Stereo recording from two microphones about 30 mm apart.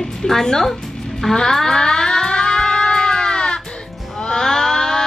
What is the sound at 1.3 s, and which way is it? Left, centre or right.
Music, centre.